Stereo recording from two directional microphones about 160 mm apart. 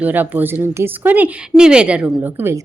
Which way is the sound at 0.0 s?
10° right (ahead or behind).